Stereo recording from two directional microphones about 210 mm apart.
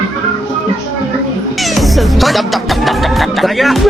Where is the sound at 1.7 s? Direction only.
Centre (ahead or behind).